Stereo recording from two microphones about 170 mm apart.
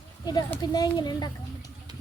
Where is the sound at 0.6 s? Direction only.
25° left (ahead or behind).